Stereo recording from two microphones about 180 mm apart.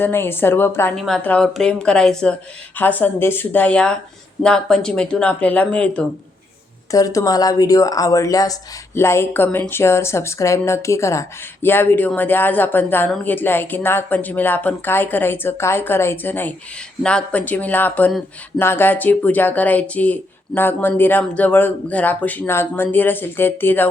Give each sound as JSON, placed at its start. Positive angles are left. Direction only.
{"t": 0.0, "sound": "speech", "side_deg": 10}
{"t": 0.9, "sound": "speech", "side_deg": 0}
{"t": 6.9, "sound": "speech", "side_deg": 20}